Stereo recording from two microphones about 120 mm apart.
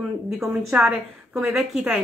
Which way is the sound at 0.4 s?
5° right (ahead or behind).